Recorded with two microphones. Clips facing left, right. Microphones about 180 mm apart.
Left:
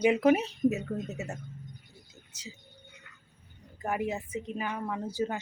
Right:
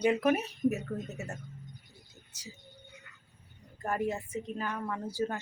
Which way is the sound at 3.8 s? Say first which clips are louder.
Left 1 dB; 10° left (ahead or behind).